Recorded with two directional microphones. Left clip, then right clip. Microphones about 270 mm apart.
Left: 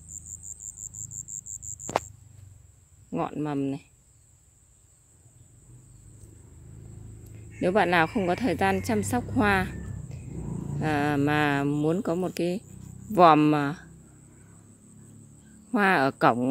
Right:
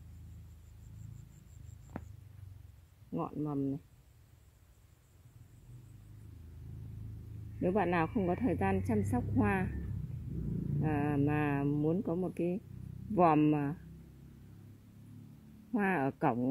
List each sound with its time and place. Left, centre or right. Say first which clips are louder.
3.1 s speech: left 8 dB; centre
7.6 s speech: left 10 dB; centre
10.8 s speech: left 8 dB; centre
15.7 s speech: left 11 dB; centre